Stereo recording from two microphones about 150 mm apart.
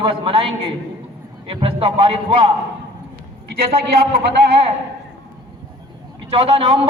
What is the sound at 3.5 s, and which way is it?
Speech, 90° right.